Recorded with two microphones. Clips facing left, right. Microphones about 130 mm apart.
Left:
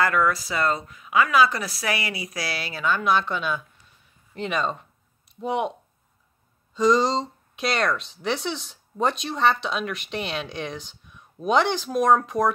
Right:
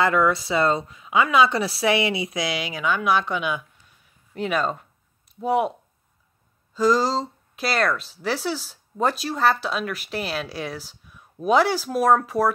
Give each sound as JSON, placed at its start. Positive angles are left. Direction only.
{"t": 0.0, "sound": "speech", "side_deg": -25}